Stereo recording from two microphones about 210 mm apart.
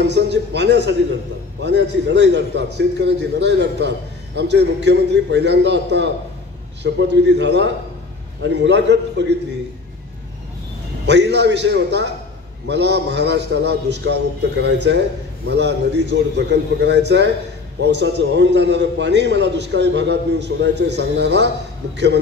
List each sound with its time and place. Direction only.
0.0 s a man's voice: 55° right (ahead or behind)
11.1 s a man's voice: 55° right (ahead or behind)